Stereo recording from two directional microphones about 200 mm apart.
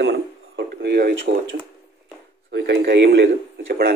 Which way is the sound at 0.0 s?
55° right (ahead or behind).